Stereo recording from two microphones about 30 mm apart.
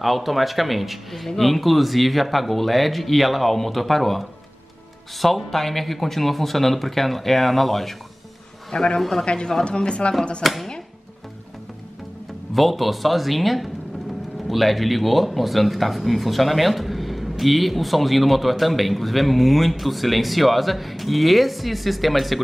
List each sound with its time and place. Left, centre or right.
0.0 s speech: centre
8.7 s a man's voice: left
10.4 s speech: centre
12.5 s speech: centre